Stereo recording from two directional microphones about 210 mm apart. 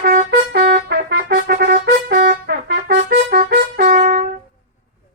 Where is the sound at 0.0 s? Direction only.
45° right (ahead or behind).